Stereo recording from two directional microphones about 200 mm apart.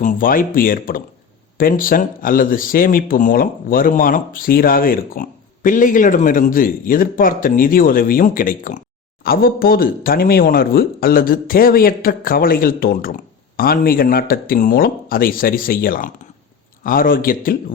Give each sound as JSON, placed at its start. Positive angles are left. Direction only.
{"t": 0.0, "sound": "speech", "side_deg": 40}